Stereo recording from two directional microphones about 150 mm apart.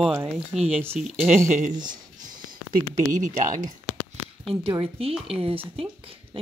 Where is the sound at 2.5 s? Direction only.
65° right (ahead or behind).